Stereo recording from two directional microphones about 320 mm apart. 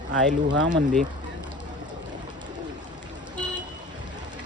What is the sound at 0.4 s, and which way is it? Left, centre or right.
Speech, right.